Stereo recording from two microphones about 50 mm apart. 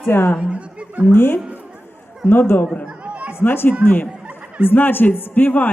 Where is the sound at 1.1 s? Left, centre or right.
Left.